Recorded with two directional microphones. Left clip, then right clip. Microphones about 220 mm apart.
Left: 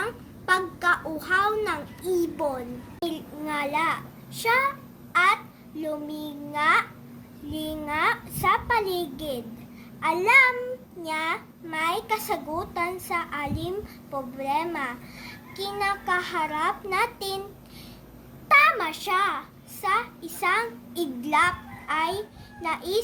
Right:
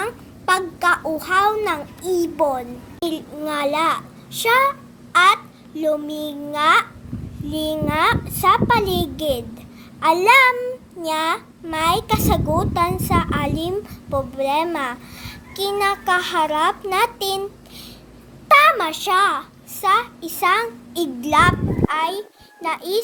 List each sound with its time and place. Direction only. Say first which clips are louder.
0.0 s a child's voice: right 6 dB; 35° right (ahead or behind)
18.4 s a child's voice: right 6 dB; 30° right (ahead or behind)